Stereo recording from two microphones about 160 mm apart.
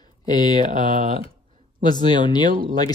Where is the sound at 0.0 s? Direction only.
25° left (ahead or behind).